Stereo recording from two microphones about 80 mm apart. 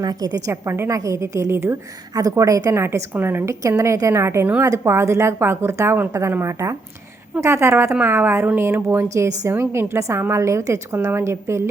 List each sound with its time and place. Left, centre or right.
0.0 s a woman's voice: right
0.5 s a woman's voice: right
2.1 s a woman's voice: right
3.5 s a woman's voice: right